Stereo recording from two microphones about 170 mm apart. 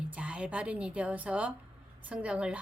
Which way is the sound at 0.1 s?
5° right (ahead or behind).